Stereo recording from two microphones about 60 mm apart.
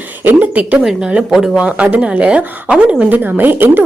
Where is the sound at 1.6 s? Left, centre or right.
Right.